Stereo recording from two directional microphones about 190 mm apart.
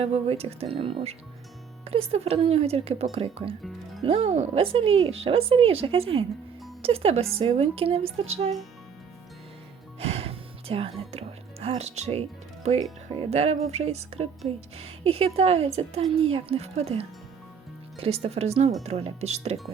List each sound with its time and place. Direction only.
0.0 s a woman's voice: 30° right (ahead or behind)
10.0 s speech: 30° right (ahead or behind)